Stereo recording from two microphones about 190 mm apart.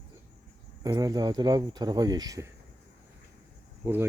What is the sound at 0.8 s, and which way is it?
Speech, 20° right (ahead or behind).